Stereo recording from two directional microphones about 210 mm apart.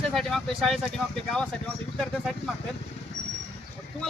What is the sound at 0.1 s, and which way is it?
Speech, centre (ahead or behind).